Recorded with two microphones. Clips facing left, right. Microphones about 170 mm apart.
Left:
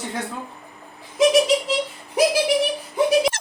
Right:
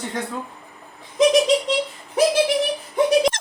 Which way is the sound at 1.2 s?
5° left (ahead or behind).